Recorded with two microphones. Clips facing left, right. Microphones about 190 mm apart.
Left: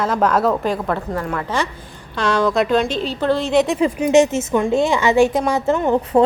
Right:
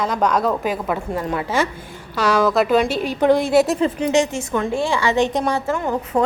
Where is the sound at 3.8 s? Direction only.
10° left (ahead or behind).